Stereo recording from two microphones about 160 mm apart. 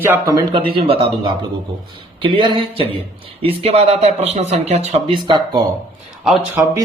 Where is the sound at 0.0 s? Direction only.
15° right (ahead or behind).